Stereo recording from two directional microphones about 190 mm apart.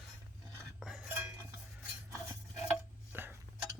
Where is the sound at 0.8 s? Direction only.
5° right (ahead or behind).